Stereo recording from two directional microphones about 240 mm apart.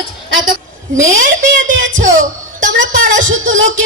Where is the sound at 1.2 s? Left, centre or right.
Right.